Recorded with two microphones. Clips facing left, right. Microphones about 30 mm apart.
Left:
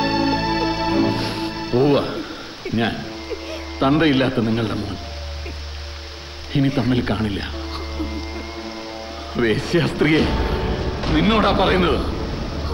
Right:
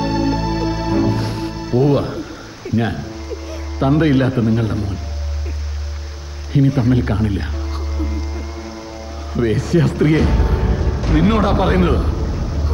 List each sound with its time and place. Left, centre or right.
0.0 s music: left
6.5 s a sound: left
9.3 s speech: left